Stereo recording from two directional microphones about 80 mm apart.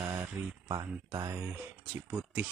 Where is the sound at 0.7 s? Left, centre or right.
Right.